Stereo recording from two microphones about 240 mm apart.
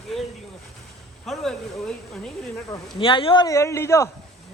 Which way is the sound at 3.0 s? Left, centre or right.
Left.